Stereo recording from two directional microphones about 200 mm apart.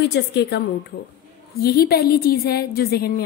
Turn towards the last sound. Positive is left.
turn(degrees=50)  # may be behind; listen again after turning